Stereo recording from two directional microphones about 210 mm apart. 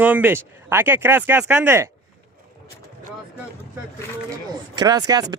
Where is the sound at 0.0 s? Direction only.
10° right (ahead or behind).